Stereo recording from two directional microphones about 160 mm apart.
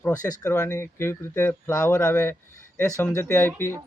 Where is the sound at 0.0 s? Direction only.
20° left (ahead or behind).